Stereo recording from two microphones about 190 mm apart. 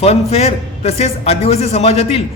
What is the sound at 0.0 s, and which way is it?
A man's voice, 35° left (ahead or behind).